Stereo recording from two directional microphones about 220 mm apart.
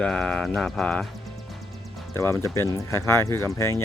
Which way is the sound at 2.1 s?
15° left (ahead or behind).